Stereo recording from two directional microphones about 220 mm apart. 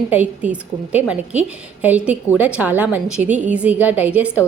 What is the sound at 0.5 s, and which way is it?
A woman's voice, 5° right (ahead or behind).